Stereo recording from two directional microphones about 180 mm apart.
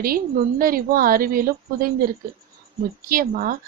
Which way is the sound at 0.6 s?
55° right (ahead or behind).